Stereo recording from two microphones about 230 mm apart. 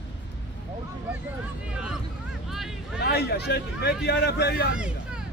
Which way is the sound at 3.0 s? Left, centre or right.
Left.